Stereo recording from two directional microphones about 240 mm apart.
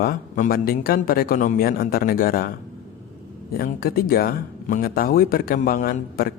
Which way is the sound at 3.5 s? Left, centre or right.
Left.